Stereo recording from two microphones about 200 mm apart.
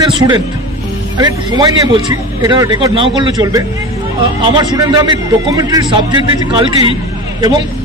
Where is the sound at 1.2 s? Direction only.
20° right (ahead or behind).